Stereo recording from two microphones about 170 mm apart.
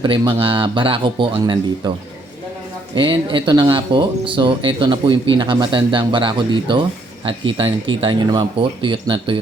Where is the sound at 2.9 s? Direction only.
30° right (ahead or behind).